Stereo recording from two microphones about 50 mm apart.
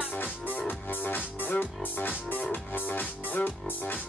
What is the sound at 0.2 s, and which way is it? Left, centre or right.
Music, left.